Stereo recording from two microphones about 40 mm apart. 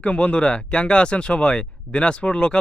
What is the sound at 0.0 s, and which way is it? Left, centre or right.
Speech, left.